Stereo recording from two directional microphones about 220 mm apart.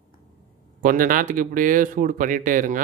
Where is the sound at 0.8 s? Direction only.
40° right (ahead or behind).